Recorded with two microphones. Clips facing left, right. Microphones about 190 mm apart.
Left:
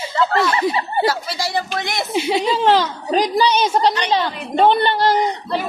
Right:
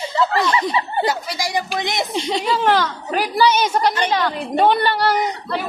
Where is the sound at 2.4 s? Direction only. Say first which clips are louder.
Left 1 dB; 20° left (ahead or behind).